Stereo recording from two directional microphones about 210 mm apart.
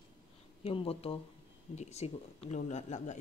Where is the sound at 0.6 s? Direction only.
25° left (ahead or behind).